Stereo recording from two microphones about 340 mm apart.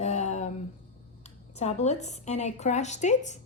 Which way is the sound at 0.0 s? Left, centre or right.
Centre.